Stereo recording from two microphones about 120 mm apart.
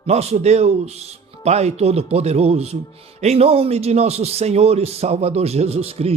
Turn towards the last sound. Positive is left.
turn(degrees=-60)  # may be behind; listen again after turning